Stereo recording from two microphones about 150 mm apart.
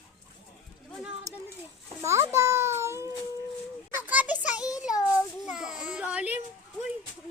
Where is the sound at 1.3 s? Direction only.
20° right (ahead or behind).